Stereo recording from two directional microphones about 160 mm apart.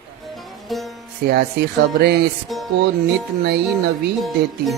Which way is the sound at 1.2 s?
90° right.